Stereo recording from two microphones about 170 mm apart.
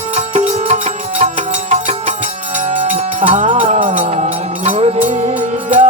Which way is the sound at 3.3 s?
45° right (ahead or behind).